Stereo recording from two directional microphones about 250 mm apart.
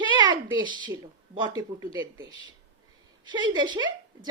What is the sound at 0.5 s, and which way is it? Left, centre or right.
Speech, centre.